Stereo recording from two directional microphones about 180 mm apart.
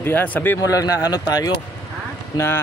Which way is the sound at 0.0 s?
10° left (ahead or behind).